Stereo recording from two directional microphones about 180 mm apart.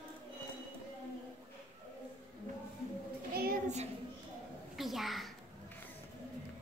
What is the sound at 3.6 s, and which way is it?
Child singing, 40° right (ahead or behind).